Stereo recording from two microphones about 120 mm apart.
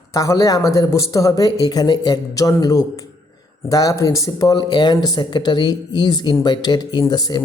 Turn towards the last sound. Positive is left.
turn(degrees=35)  # may be behind; listen again after turning